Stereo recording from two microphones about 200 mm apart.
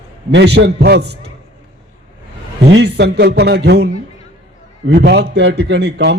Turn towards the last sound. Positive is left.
turn(degrees=-55)  # may be behind; listen again after turning